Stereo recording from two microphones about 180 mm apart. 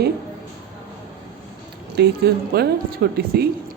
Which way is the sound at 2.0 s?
65° right (ahead or behind).